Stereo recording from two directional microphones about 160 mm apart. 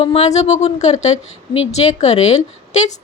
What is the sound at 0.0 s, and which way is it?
A woman's voice, 40° left (ahead or behind).